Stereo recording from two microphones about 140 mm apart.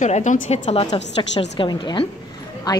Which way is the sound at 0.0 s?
60° left (ahead or behind).